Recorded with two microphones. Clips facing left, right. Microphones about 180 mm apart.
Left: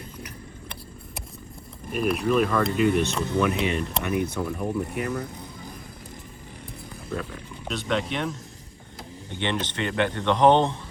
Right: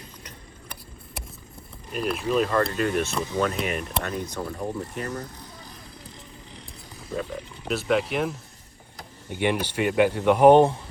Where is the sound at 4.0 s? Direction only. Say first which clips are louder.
Left 4 dB; 15° left (ahead or behind).